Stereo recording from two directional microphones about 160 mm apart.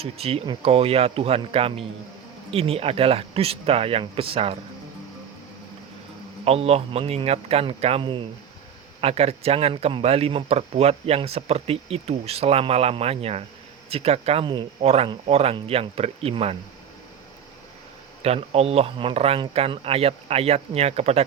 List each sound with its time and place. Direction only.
0.0 s a man's voice: 40° right (ahead or behind)
6.4 s a man's voice: 40° right (ahead or behind)
18.2 s a man's voice: 40° right (ahead or behind)